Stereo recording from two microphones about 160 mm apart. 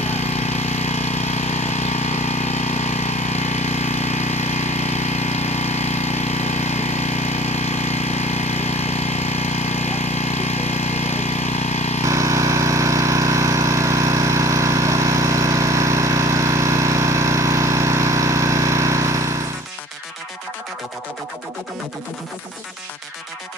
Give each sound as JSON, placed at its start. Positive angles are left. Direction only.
{"t": 0.0, "sound": "engine", "side_deg": 45}
{"t": 12.1, "sound": "engine", "side_deg": -20}